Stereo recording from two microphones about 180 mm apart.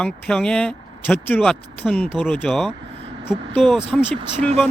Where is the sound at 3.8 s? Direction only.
5° left (ahead or behind).